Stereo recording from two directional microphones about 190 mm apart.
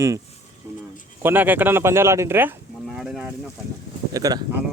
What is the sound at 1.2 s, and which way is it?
Speech, 10° right (ahead or behind).